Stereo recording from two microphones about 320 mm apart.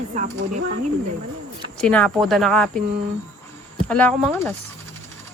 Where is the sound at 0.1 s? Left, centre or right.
Right.